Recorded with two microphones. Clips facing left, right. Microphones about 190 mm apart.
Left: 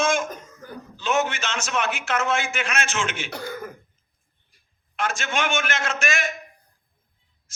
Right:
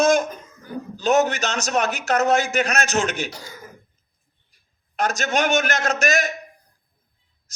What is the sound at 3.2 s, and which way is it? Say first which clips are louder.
Speech: left 5 dB; 60° left (ahead or behind).